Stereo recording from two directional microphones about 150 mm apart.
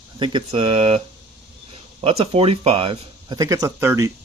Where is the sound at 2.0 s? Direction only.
40° right (ahead or behind).